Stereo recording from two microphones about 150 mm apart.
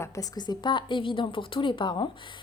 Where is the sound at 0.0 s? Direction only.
20° left (ahead or behind).